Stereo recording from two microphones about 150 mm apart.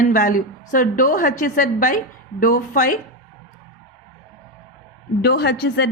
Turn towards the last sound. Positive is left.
turn(degrees=90)